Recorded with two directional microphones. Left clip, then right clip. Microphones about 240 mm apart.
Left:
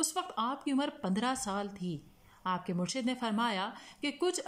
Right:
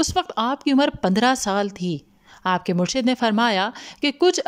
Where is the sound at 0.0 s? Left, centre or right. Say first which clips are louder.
Right 12 dB; right.